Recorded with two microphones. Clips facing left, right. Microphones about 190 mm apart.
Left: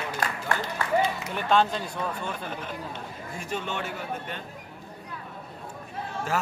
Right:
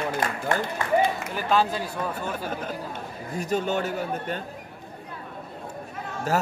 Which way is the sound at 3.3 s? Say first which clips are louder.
Right 7 dB; 40° right (ahead or behind).